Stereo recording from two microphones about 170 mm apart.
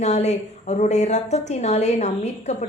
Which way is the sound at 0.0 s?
40° left (ahead or behind).